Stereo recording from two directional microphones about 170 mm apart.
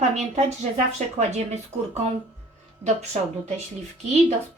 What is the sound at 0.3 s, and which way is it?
A woman's voice, 45° right (ahead or behind).